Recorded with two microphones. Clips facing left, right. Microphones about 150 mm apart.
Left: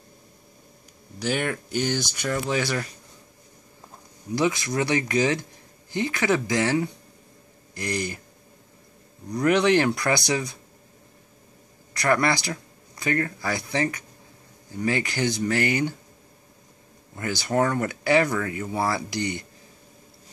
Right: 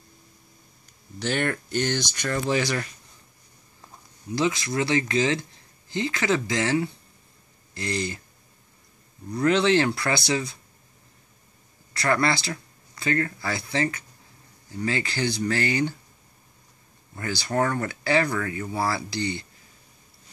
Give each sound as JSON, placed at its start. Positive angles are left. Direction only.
{"t": 1.2, "sound": "speech", "side_deg": 5}
{"t": 4.4, "sound": "speech", "side_deg": 15}
{"t": 9.3, "sound": "speech", "side_deg": 15}
{"t": 11.9, "sound": "speech", "side_deg": 15}
{"t": 17.1, "sound": "speech", "side_deg": 15}